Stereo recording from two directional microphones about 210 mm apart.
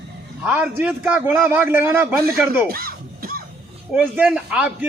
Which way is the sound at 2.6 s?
45° right (ahead or behind).